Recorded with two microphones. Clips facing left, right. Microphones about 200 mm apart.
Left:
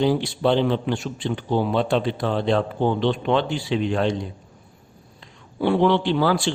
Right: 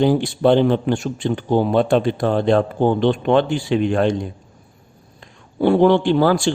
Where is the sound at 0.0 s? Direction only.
50° right (ahead or behind).